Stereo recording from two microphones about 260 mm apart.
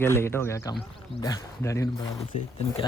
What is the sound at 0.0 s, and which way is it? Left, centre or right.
Speech, centre.